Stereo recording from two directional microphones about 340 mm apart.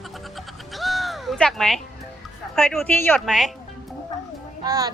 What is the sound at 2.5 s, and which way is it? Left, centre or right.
Speech, centre.